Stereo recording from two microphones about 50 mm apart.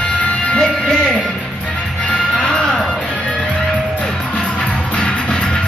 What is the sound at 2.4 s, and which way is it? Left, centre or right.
Music, centre.